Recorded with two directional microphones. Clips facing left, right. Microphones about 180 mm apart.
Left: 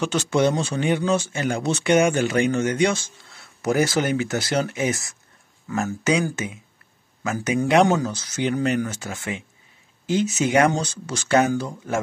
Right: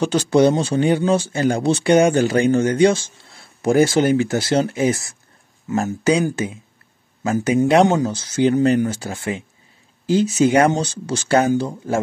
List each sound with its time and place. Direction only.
0.0 s speech: 35° right (ahead or behind)
6.3 s speech: 30° right (ahead or behind)